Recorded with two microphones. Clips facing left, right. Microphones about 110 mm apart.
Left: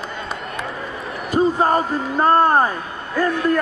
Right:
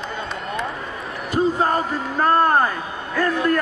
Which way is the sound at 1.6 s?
20° left (ahead or behind).